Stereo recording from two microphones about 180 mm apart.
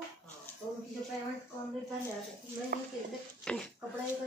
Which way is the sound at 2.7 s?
55° right (ahead or behind).